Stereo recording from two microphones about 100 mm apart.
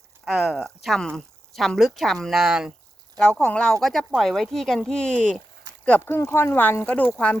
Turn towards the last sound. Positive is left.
turn(degrees=15)  # may be behind; listen again after turning